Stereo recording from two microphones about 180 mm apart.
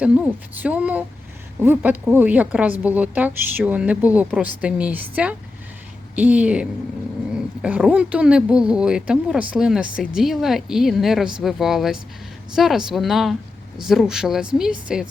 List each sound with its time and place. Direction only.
0.6 s speech: 10° right (ahead or behind)